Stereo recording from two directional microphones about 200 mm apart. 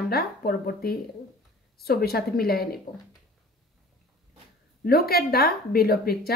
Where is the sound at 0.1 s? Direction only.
50° left (ahead or behind).